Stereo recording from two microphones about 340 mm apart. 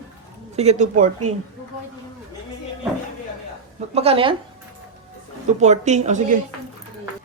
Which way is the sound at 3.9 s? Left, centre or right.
Centre.